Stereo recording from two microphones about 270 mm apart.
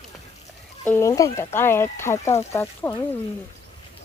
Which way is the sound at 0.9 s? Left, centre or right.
Centre.